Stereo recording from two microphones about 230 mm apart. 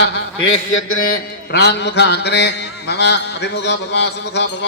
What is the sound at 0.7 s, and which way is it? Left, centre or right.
Mantra, left.